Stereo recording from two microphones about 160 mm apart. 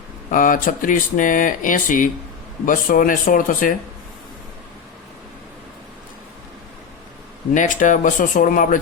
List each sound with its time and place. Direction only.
0.3 s speech: 55° left (ahead or behind)
7.5 s speech: 50° left (ahead or behind)